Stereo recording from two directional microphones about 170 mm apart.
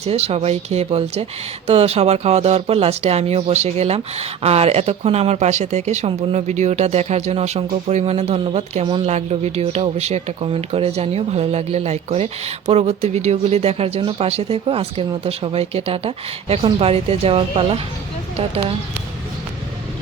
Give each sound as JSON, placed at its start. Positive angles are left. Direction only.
{"t": 0.0, "sound": "speech", "side_deg": -35}